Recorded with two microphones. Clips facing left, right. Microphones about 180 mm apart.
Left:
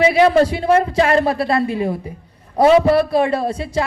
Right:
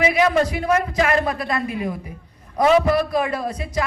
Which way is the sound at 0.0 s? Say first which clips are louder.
Left 5 dB; 30° left (ahead or behind).